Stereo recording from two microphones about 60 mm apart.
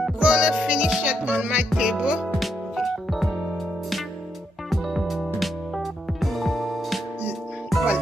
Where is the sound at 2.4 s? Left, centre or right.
Centre.